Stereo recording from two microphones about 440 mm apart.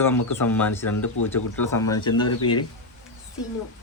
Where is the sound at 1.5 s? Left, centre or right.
Centre.